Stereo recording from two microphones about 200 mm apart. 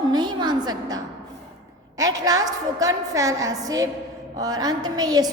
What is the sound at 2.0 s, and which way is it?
A woman's voice, 20° right (ahead or behind).